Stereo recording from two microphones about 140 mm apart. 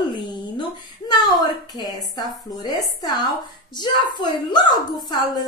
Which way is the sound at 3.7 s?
30° left (ahead or behind).